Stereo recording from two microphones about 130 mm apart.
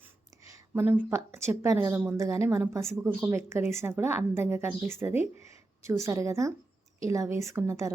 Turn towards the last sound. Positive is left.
turn(degrees=-20)  # may be behind; listen again after turning